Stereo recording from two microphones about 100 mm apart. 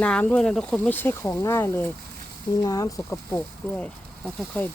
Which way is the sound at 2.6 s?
35° left (ahead or behind).